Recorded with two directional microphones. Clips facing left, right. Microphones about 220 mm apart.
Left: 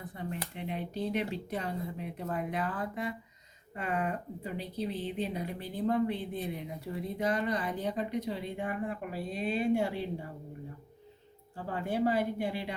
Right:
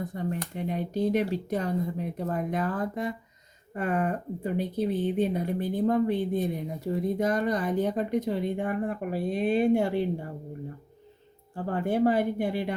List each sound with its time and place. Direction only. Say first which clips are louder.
0.0 s speech: right 7 dB; 40° right (ahead or behind)
11.5 s speech: right 6 dB; 50° right (ahead or behind)